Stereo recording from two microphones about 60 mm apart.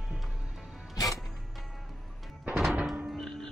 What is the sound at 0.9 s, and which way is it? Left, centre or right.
Music, left.